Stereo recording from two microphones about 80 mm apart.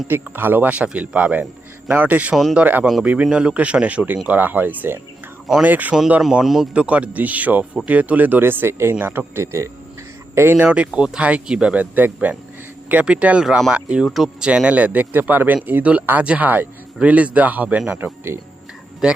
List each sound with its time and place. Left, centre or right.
0.1 s speech: right
2.3 s speech: centre
2.6 s speech: centre
6.4 s speech: centre
6.7 s speech: centre
10.7 s speech: centre
18.0 s speech: right
19.0 s speech: centre